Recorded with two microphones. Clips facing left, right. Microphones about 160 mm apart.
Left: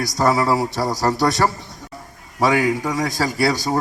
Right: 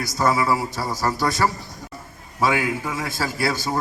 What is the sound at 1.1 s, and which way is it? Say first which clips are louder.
Speech: left 4 dB; 75° left (ahead or behind).